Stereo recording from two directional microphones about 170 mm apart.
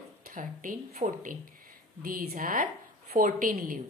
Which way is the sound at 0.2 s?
50° right (ahead or behind).